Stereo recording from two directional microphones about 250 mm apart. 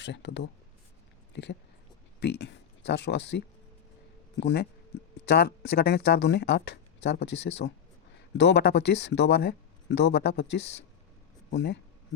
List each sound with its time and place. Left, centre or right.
0.0 s speech: left